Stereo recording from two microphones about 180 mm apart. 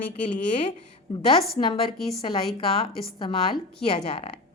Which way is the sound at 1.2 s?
30° left (ahead or behind).